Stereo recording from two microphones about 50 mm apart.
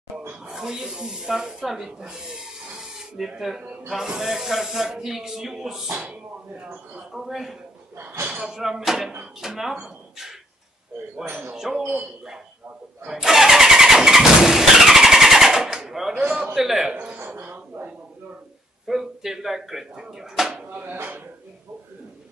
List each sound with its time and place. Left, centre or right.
0.5 s speech: centre
3.6 s a man's voice: right
3.9 s speech: centre
7.1 s a man's voice: centre
8.0 s speech: right
8.5 s speech: centre
11.2 s speech: right
11.5 s speech: centre
13.0 s vehicle: centre
16.5 s speech: centre
17.3 s a sound: right
18.9 s speech: centre
20.7 s speech: right